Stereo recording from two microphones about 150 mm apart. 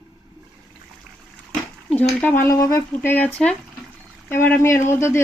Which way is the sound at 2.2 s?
15° left (ahead or behind).